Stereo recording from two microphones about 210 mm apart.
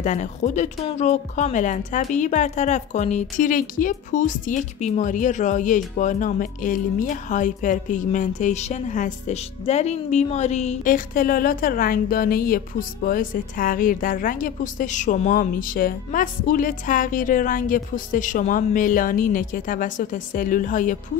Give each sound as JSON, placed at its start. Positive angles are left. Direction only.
{"t": 0.0, "sound": "speech", "side_deg": 35}